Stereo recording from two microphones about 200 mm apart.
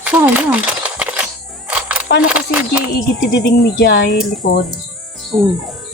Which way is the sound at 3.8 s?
55° left (ahead or behind).